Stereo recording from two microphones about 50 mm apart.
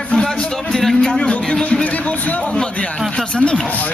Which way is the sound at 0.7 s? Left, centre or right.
Centre.